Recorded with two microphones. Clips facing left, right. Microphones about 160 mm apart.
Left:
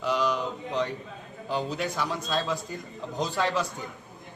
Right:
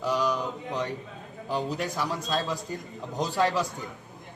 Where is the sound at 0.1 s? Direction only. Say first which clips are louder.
Even; 10° right (ahead or behind).